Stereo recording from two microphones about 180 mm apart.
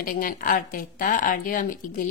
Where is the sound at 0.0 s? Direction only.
50° left (ahead or behind).